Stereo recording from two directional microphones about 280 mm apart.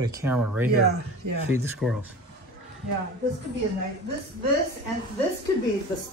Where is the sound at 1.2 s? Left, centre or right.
Right.